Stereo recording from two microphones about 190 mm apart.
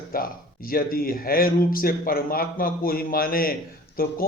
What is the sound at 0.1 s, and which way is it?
Speech, 50° left (ahead or behind).